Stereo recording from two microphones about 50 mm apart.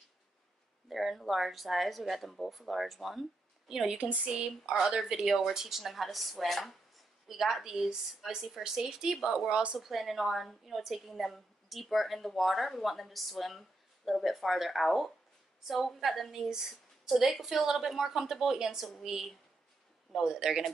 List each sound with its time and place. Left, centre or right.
0.8 s a woman's voice: centre
4.0 s speech: right
4.3 s a woman's voice: centre
9.5 s speech: right
9.8 s a woman's voice: centre